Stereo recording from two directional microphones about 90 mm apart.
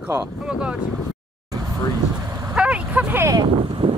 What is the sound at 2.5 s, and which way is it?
Vehicle, 10° right (ahead or behind).